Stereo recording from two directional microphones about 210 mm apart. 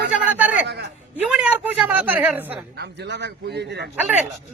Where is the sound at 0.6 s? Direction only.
50° right (ahead or behind).